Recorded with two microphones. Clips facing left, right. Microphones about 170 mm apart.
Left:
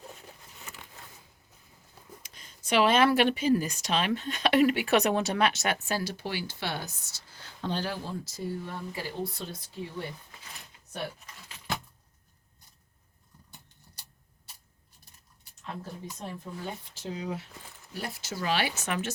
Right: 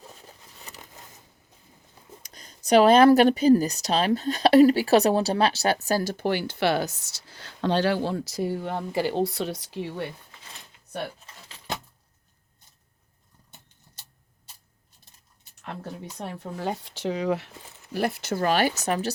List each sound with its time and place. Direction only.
0.7 s a sound: 35° right (ahead or behind)
2.2 s speech: 40° right (ahead or behind); by 10.1 s 80° right
15.6 s speech: 70° right (ahead or behind)
17.9 s speech: 65° right (ahead or behind); by 19.1 s 35° right (ahead or behind)